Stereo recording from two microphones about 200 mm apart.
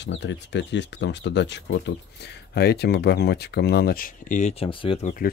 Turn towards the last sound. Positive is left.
turn(degrees=25)  # may be behind; listen again after turning